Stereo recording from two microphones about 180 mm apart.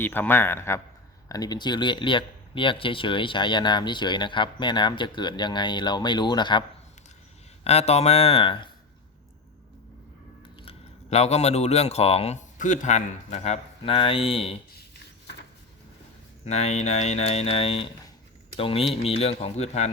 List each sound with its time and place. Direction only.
0.0 s a man's voice: 10° left (ahead or behind)
7.6 s speech: 35° left (ahead or behind)
10.6 s speech: 35° left (ahead or behind)
16.5 s speech: 35° left (ahead or behind)